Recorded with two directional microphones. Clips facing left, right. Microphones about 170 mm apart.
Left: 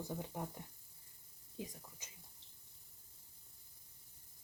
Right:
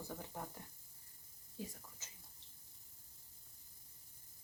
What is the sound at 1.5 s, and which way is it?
Speech, 20° left (ahead or behind).